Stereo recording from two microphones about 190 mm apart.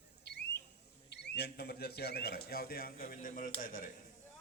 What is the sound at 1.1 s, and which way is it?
A man's voice, 60° left (ahead or behind).